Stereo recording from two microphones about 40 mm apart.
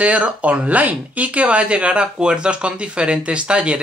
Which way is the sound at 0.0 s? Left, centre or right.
Right.